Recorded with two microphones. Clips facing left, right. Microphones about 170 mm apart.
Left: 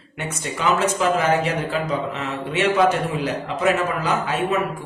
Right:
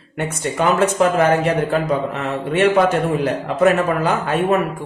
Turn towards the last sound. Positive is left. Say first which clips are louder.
# right 4 dB
turn(degrees=-55)  # may be behind; listen again after turning